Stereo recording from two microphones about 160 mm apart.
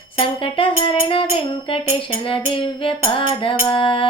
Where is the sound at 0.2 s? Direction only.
35° left (ahead or behind).